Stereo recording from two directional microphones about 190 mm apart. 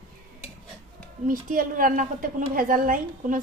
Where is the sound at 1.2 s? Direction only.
45° right (ahead or behind).